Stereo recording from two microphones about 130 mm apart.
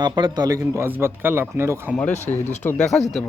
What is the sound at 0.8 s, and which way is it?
Speech, 15° right (ahead or behind).